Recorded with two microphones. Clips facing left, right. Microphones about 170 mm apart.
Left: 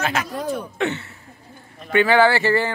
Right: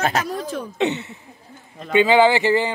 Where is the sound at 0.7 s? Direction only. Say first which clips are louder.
Right 2 dB; 20° right (ahead or behind).